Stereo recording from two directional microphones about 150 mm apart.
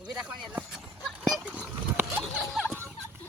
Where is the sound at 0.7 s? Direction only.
Centre (ahead or behind).